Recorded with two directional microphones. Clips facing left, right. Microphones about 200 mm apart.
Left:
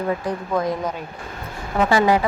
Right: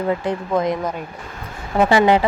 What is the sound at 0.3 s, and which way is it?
Speech, 20° right (ahead or behind).